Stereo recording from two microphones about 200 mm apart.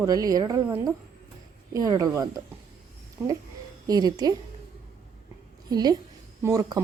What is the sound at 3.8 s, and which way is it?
Speech, 20° right (ahead or behind).